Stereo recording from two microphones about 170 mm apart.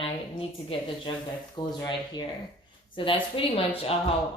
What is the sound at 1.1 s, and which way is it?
Speech, 30° left (ahead or behind).